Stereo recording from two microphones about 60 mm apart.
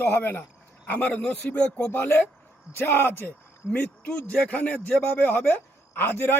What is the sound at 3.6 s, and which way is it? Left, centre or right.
A man's voice, left.